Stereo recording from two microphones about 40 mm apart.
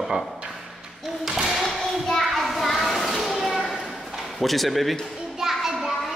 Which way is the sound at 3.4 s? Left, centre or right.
Centre.